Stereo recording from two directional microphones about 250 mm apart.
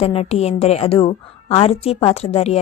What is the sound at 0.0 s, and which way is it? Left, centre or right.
A woman's voice, left.